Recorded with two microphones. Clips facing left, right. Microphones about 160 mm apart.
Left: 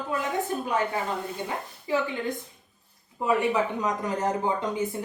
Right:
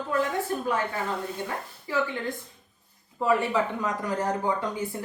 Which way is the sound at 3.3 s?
20° left (ahead or behind).